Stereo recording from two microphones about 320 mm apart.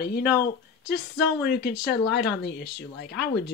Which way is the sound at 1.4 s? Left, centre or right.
Left.